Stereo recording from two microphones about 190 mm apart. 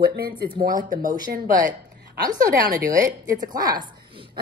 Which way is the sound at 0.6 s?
45° right (ahead or behind).